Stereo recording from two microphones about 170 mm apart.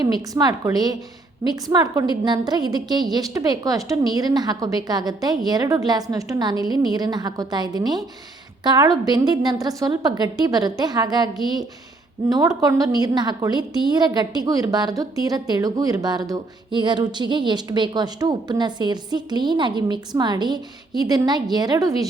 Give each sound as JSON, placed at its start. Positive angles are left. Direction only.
{"t": 0.0, "sound": "a woman's voice", "side_deg": -25}
{"t": 12.3, "sound": "a woman's voice", "side_deg": -20}